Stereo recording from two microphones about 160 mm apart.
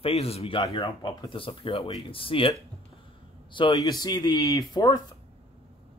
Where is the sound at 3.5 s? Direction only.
25° left (ahead or behind).